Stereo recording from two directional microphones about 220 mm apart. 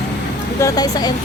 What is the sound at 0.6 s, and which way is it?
Speech, 15° left (ahead or behind).